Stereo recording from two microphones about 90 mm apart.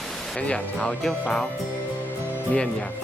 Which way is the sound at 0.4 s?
10° left (ahead or behind).